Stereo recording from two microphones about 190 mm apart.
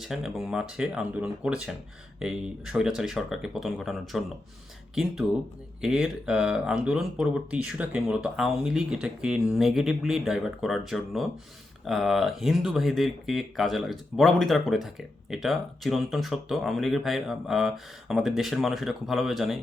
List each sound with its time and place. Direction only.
0.0 s speech: centre (ahead or behind)
5.8 s speech: 5° right (ahead or behind)